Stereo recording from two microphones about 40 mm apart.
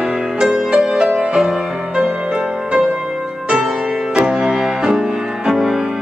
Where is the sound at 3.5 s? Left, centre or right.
Centre.